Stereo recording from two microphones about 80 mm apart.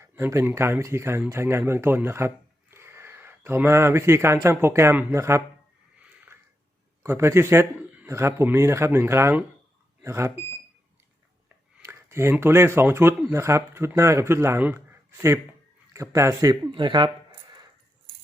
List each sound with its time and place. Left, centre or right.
0.0 s speech: right
7.0 s speech: right
7.8 s a sound: centre
8.0 s a man's voice: right
11.9 s speech: right
16.7 s speech: right